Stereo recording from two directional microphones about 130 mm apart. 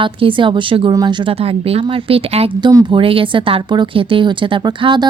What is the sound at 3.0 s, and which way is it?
Speech, 45° right (ahead or behind).